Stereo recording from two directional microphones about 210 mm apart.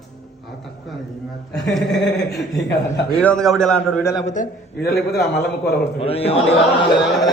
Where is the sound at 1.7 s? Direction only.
Centre (ahead or behind).